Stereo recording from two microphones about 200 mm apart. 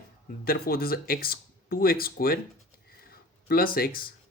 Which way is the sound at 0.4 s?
50° left (ahead or behind).